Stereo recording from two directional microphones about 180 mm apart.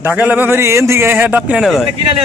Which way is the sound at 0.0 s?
10° right (ahead or behind).